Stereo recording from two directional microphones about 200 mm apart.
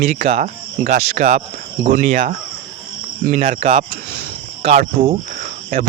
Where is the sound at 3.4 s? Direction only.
35° right (ahead or behind).